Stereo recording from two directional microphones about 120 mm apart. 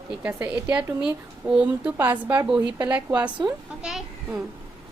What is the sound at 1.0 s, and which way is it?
A child's voice, 10° right (ahead or behind).